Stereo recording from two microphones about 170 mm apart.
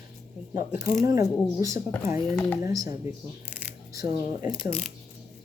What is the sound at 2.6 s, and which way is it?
Speech, 20° right (ahead or behind).